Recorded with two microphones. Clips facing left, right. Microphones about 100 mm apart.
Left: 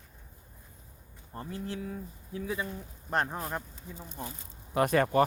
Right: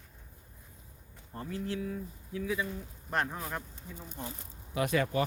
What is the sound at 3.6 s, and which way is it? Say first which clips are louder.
Speech: left 2 dB; 20° left (ahead or behind).